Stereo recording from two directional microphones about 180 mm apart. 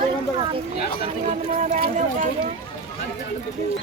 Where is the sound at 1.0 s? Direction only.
40° right (ahead or behind).